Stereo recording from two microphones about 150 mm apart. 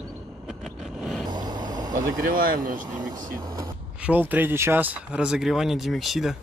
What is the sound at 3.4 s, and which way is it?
Speech, 25° right (ahead or behind).